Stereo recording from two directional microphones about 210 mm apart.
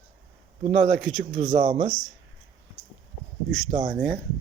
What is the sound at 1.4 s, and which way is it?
Speech, 35° right (ahead or behind).